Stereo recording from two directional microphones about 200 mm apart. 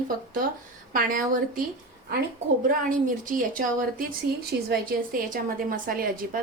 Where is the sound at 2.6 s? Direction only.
40° right (ahead or behind).